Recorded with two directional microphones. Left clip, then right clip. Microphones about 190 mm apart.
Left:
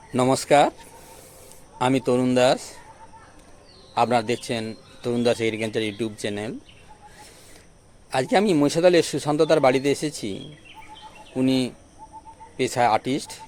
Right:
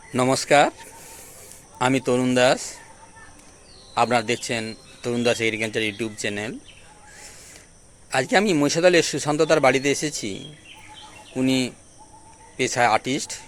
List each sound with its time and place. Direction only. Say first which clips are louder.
0.1 s a man's voice: even; 10° left (ahead or behind)
3.9 s a man's voice: even; 5° left (ahead or behind)
8.1 s a man's voice: right 1 dB; 10° left (ahead or behind)